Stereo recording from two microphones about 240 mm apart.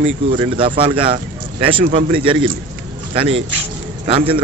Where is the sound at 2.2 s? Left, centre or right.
Right.